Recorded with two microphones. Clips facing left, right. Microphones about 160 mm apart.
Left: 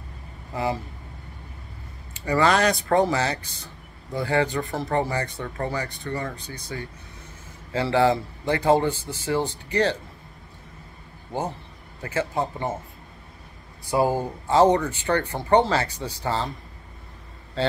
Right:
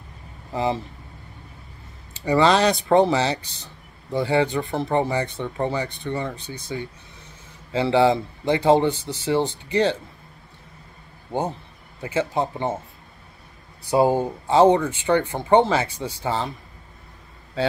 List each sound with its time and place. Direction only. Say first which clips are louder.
0.5 s speech: right 3 dB; 25° right (ahead or behind)
2.2 s speech: right 3 dB; 25° right (ahead or behind)
8.8 s speech: right 3 dB; 10° left (ahead or behind)
9.7 s speech: right 2 dB; 25° right (ahead or behind)
12.0 s speech: right 3 dB; 25° right (ahead or behind)
13.8 s speech: right 4 dB; 25° right (ahead or behind)